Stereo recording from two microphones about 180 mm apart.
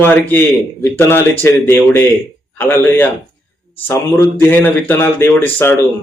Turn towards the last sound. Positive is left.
turn(degrees=10)  # may be behind; listen again after turning